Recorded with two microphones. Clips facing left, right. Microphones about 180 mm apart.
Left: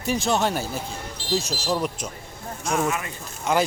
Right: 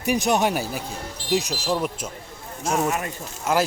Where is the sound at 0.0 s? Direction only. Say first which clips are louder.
Right 2 dB; 15° right (ahead or behind).